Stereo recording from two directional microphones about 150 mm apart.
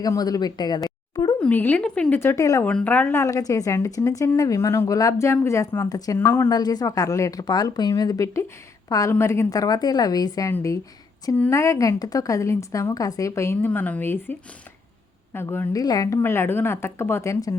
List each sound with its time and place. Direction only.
0.0 s a woman's voice: 25° left (ahead or behind)
0.9 s a sound: 25° left (ahead or behind)
1.4 s a woman's voice: 10° left (ahead or behind)
2.6 s a woman's voice: 10° left (ahead or behind)